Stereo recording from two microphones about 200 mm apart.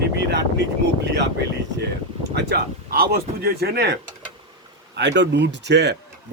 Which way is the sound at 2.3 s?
50° right (ahead or behind).